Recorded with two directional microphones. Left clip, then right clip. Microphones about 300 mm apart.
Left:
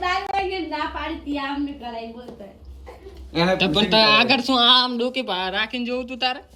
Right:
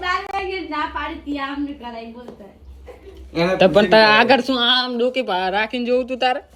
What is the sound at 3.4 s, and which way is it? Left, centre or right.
Speech, centre.